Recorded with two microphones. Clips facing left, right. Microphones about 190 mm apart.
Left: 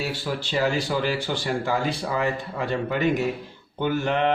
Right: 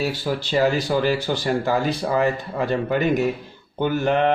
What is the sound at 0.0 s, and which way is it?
Speech, 40° right (ahead or behind).